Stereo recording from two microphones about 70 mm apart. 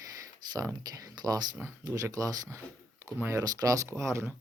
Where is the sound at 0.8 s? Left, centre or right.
Right.